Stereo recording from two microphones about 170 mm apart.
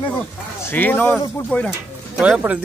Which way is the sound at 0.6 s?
10° left (ahead or behind).